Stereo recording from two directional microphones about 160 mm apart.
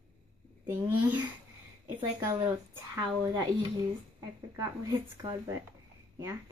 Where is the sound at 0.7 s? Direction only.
10° right (ahead or behind).